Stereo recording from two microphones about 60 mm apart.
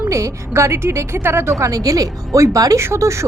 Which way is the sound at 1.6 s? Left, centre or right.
Right.